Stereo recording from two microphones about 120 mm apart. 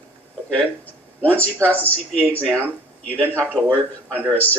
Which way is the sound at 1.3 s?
10° left (ahead or behind).